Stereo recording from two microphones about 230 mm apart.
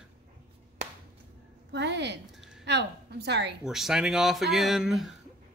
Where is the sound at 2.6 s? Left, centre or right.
Right.